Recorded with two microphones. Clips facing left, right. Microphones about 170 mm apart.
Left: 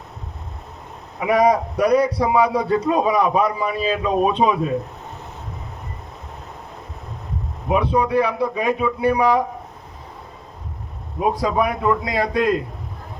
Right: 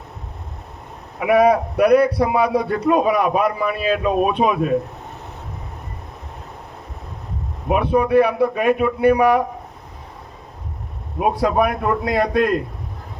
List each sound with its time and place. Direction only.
1.2 s speech: 60° right (ahead or behind)
7.7 s speech: 60° right (ahead or behind)
11.2 s speech: 60° right (ahead or behind)